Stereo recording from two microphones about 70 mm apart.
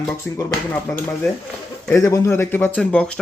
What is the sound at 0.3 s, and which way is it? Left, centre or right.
Speech, centre.